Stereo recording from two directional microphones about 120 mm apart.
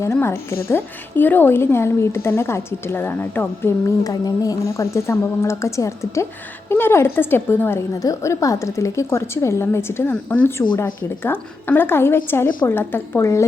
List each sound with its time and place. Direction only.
0.0 s a woman's voice: 20° left (ahead or behind)